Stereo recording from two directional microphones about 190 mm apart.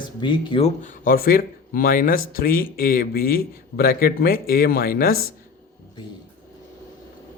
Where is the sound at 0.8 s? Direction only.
45° left (ahead or behind).